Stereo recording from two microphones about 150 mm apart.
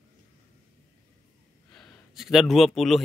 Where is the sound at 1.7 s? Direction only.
Centre (ahead or behind).